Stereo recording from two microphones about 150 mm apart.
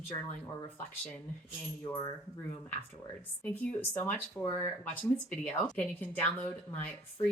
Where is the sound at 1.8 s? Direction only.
25° left (ahead or behind).